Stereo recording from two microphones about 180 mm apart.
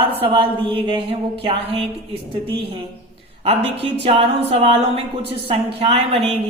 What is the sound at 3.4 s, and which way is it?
A woman's voice, 35° right (ahead or behind).